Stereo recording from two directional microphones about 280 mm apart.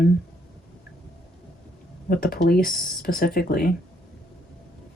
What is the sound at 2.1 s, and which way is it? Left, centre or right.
Speech, left.